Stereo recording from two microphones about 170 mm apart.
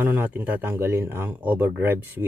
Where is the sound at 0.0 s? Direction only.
10° right (ahead or behind).